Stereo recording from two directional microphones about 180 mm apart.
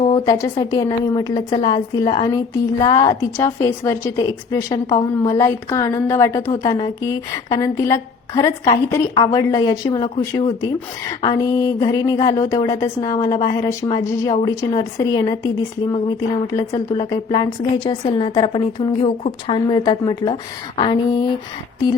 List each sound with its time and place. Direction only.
0.0 s a woman's voice: 25° left (ahead or behind)